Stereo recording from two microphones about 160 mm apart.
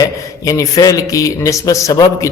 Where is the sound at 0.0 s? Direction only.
20° left (ahead or behind).